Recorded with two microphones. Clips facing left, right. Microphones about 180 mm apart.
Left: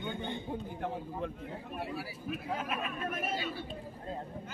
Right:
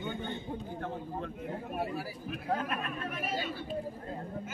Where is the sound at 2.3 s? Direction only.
5° left (ahead or behind).